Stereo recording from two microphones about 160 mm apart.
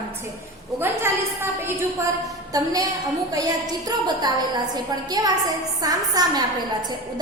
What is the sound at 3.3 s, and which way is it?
Speech, 25° right (ahead or behind).